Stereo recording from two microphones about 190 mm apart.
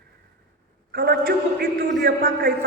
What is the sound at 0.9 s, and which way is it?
A man's voice, 55° right (ahead or behind).